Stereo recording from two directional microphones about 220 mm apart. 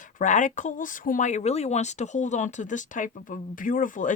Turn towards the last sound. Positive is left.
turn(degrees=35)  # may be behind; listen again after turning